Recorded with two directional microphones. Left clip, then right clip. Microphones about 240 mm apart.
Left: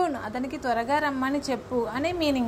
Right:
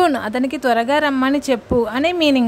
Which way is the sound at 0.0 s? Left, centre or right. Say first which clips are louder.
Right 11 dB; right.